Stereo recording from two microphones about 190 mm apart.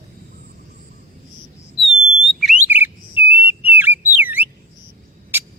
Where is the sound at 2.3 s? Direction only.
Centre (ahead or behind).